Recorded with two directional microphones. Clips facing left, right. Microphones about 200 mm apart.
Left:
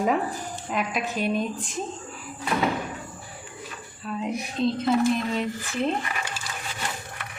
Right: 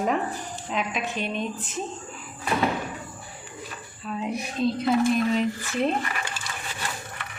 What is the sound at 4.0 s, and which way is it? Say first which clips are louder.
Speech: even; centre (ahead or behind).